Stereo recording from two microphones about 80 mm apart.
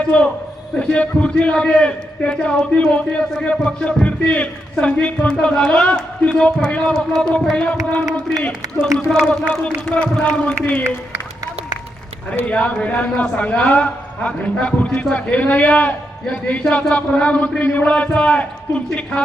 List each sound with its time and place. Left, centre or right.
0.1 s a man's voice: centre
9.0 s a man's voice: centre
12.4 s a man's voice: centre